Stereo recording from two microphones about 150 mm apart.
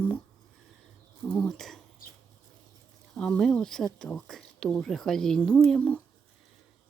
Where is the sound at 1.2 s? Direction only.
5° left (ahead or behind).